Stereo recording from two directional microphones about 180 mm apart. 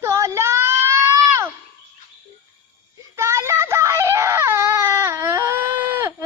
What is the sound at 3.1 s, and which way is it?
Screaming, 15° right (ahead or behind).